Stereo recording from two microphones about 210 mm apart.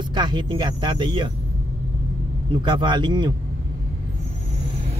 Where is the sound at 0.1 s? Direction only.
20° right (ahead or behind).